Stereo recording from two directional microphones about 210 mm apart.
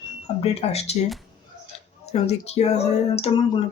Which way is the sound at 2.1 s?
30° left (ahead or behind).